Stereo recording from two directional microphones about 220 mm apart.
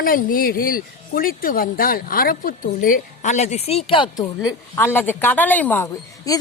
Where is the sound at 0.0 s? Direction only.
40° left (ahead or behind); by 4.3 s 20° left (ahead or behind).